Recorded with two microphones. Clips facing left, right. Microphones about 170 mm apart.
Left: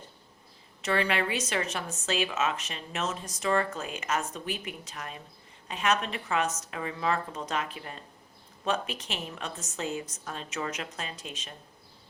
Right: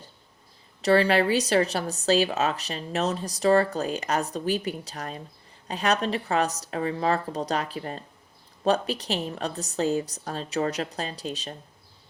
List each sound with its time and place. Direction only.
0.8 s speech: 35° right (ahead or behind)